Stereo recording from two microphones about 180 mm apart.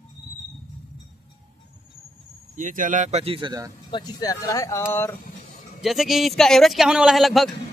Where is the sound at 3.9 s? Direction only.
25° left (ahead or behind).